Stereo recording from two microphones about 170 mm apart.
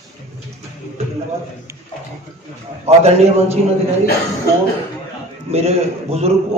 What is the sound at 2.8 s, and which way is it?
Speech, 40° right (ahead or behind).